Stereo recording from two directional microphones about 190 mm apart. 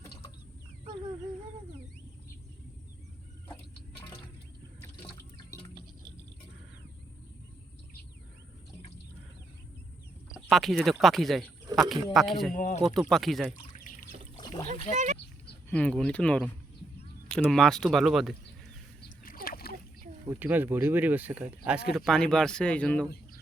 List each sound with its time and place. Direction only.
4.8 s water: 15° left (ahead or behind)
10.3 s speech: centre (ahead or behind)
11.7 s a sound: 20° right (ahead or behind)
12.1 s speech: centre (ahead or behind)
12.5 s speech: 40° left (ahead or behind)
12.8 s speech: centre (ahead or behind)
13.5 s pour: 45° left (ahead or behind)
14.3 s splash: 20° left (ahead or behind)
14.9 s speech: 40° right (ahead or behind)
15.7 s speech: 5° left (ahead or behind)
19.2 s splash: 50° left (ahead or behind)
20.2 s speech: 10° right (ahead or behind); by 23.0 s 5° left (ahead or behind)